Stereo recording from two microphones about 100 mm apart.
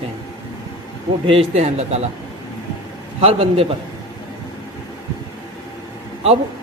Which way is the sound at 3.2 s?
85° right.